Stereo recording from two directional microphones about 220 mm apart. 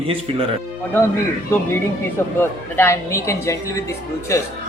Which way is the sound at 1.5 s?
10° left (ahead or behind).